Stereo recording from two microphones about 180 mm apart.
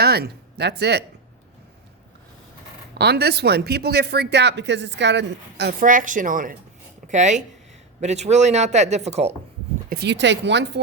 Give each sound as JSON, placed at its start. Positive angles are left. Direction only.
{"t": 0.0, "sound": "speech", "side_deg": -60}
{"t": 3.0, "sound": "speech", "side_deg": -65}
{"t": 5.8, "sound": "speech", "side_deg": -45}
{"t": 9.9, "sound": "speech", "side_deg": -70}